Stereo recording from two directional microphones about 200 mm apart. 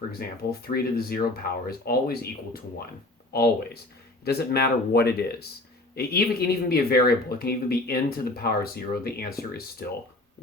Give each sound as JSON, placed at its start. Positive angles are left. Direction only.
{"t": 0.2, "sound": "speech", "side_deg": 50}